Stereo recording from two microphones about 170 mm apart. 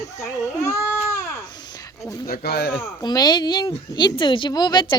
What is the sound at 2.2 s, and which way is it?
Speech, 65° left (ahead or behind).